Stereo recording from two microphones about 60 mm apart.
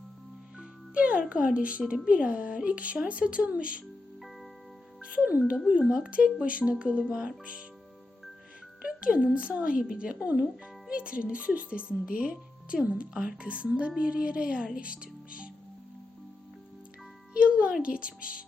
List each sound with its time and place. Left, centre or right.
0.6 s speech: centre
5.0 s music: right
5.6 s speech: right
8.8 s speech: centre
17.3 s speech: centre